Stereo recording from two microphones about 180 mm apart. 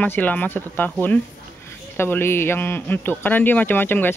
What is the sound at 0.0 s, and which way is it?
Speech, 10° left (ahead or behind).